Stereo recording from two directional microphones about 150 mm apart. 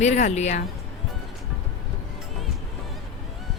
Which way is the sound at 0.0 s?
50° left (ahead or behind).